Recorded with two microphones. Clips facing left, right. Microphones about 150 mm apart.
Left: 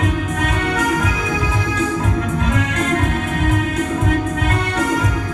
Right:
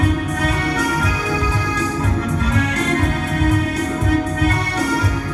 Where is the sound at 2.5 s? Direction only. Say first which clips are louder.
Right 2 dB; 35° right (ahead or behind).